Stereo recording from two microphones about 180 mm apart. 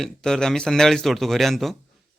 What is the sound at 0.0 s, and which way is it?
Speech, 5° left (ahead or behind).